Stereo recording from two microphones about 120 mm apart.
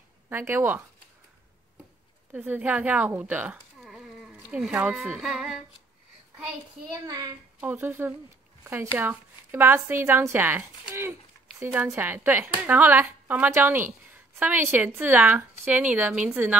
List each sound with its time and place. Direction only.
0.3 s speech: 20° right (ahead or behind)
2.3 s speech: 15° right (ahead or behind)
6.9 s a child's voice: 30° right (ahead or behind)
7.6 s speech: 20° right (ahead or behind)